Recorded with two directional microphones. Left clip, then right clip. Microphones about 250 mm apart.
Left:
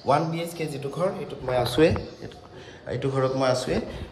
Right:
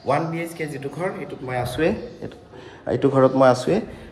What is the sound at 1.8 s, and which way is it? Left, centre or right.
Speech, left.